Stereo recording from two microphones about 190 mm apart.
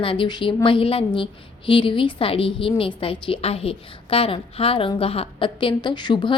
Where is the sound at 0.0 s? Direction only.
25° left (ahead or behind).